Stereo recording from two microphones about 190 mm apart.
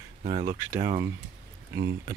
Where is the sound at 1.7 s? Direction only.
65° right (ahead or behind).